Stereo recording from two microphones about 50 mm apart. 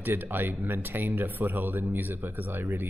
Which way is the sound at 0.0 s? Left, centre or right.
Right.